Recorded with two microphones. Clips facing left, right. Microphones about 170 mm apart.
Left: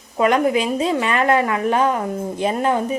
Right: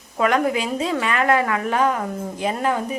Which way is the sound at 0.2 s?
20° left (ahead or behind).